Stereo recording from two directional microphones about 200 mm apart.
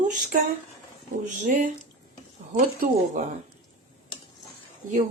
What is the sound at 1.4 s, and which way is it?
Speech, 40° right (ahead or behind).